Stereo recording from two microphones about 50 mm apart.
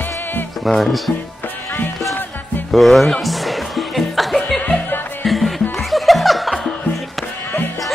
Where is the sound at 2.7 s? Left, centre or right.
Centre.